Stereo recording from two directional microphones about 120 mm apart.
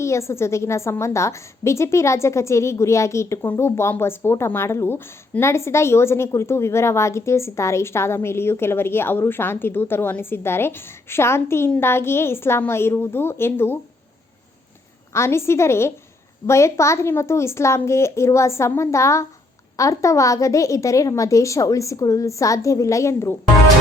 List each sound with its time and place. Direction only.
0.0 s a woman's voice: 25° left (ahead or behind)
15.1 s a woman's voice: 20° left (ahead or behind)